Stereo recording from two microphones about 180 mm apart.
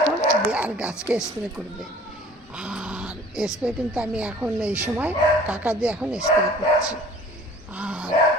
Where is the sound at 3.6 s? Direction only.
5° right (ahead or behind).